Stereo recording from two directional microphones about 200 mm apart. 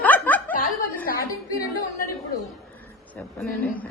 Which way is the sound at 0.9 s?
45° left (ahead or behind).